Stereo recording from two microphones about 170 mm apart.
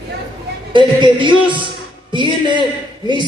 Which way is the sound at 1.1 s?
30° right (ahead or behind).